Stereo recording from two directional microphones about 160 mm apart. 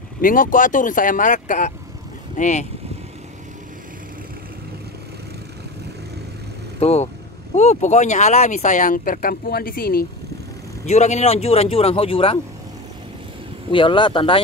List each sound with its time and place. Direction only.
0.2 s speech: 60° left (ahead or behind)
6.8 s speech: 40° left (ahead or behind); by 10.0 s 70° left (ahead or behind)
10.9 s speech: 45° left (ahead or behind)
13.7 s speech: 30° left (ahead or behind)